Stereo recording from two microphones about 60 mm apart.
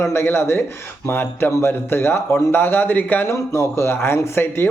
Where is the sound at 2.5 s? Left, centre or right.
Left.